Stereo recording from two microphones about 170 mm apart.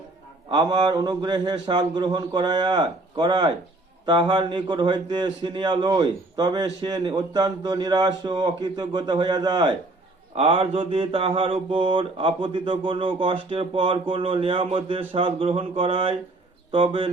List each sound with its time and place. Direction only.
0.5 s a man's voice: 25° right (ahead or behind)
10.3 s mantra: 35° right (ahead or behind)